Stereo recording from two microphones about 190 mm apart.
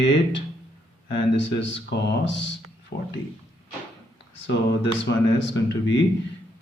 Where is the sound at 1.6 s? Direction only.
75° left (ahead or behind).